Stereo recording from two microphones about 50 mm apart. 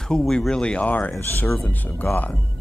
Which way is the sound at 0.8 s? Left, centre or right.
Left.